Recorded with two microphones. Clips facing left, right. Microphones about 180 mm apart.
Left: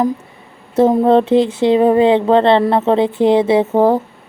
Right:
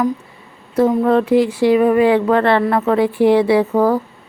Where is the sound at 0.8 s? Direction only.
25° left (ahead or behind).